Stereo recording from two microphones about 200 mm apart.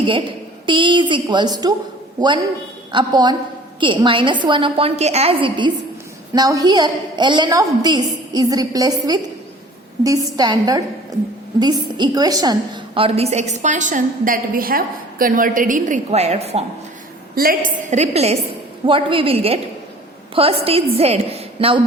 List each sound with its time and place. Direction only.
0.0 s a woman's voice: 25° right (ahead or behind)
2.9 s a woman's voice: 20° right (ahead or behind)
17.3 s a woman's voice: 45° right (ahead or behind); by 21.8 s 30° right (ahead or behind)